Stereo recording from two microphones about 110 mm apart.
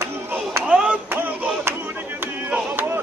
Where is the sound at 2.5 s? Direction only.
20° right (ahead or behind).